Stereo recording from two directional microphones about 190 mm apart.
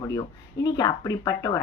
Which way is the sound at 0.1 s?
20° left (ahead or behind).